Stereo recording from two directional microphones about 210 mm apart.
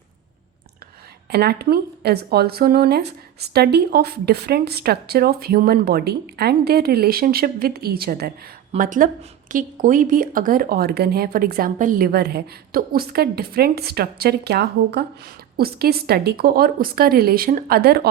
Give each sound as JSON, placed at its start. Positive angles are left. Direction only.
{"t": 1.3, "sound": "speech", "side_deg": -50}